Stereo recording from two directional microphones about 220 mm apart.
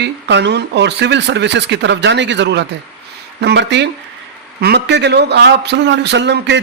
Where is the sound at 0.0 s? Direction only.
50° right (ahead or behind).